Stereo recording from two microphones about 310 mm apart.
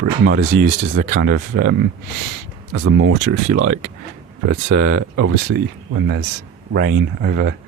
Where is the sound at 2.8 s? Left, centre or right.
Right.